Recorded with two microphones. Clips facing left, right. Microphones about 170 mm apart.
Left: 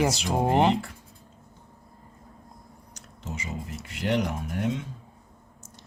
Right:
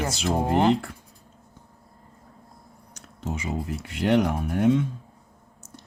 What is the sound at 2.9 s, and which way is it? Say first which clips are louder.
Speech: right 6 dB; 55° right (ahead or behind).